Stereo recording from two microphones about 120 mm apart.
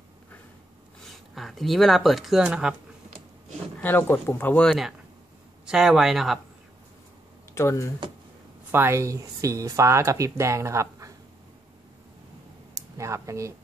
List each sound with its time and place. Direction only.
1.0 s speech: centre (ahead or behind)
3.8 s speech: 15° left (ahead or behind)
4.6 s speech: 5° right (ahead or behind)
7.5 s speech: 25° left (ahead or behind)
8.7 s speech: 20° right (ahead or behind)
12.7 s speech: 25° right (ahead or behind)